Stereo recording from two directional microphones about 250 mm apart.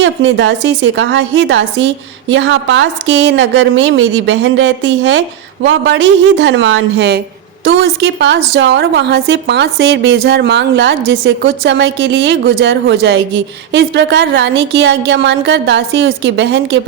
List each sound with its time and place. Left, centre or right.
0.0 s a woman's voice: right